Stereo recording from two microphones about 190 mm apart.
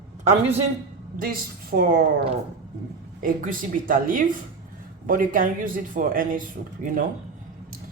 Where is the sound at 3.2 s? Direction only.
45° right (ahead or behind).